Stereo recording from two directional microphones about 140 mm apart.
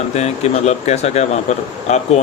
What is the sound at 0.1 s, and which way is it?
Speech, 50° left (ahead or behind).